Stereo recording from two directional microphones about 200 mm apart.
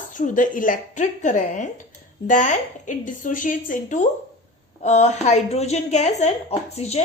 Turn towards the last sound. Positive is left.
turn(degrees=30)  # may be behind; listen again after turning